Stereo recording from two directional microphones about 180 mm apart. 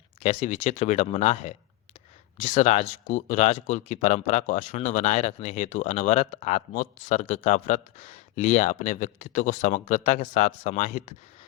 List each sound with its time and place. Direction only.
0.2 s speech: 40° left (ahead or behind)